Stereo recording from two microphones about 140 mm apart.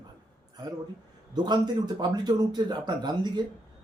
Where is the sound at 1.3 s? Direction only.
30° right (ahead or behind).